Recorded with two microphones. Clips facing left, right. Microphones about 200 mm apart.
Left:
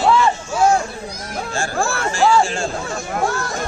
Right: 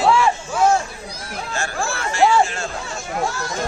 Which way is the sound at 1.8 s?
50° left (ahead or behind).